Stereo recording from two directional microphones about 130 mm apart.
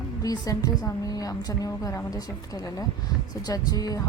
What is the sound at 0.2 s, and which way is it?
A woman's voice, 30° left (ahead or behind).